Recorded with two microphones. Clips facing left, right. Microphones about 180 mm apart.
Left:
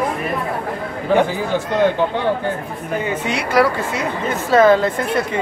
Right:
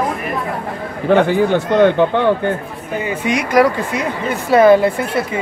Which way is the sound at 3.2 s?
15° right (ahead or behind).